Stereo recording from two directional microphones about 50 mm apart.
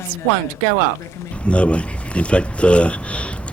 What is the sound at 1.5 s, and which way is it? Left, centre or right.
Speech, left.